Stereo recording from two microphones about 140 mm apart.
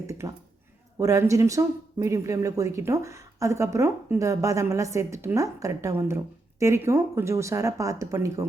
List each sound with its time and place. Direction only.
0.2 s speech: 20° right (ahead or behind)